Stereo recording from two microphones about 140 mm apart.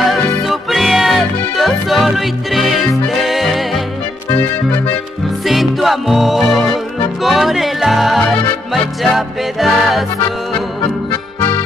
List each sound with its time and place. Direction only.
0.0 s music: centre (ahead or behind)
5.4 s music: centre (ahead or behind)